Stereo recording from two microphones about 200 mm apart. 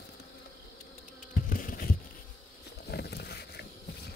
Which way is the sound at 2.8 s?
55° left (ahead or behind).